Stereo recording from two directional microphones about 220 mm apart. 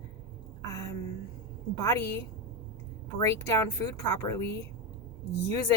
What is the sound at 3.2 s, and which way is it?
Speech, 15° left (ahead or behind).